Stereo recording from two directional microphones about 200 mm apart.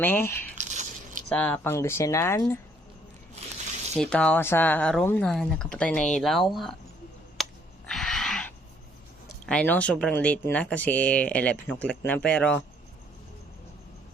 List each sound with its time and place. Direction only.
0.0 s speech: 10° left (ahead or behind)
0.5 s a sound: 35° right (ahead or behind)
1.3 s speech: 5° left (ahead or behind)
3.9 s speech: 5° left (ahead or behind)
7.4 s a sound: centre (ahead or behind)
9.5 s speech: 5° left (ahead or behind)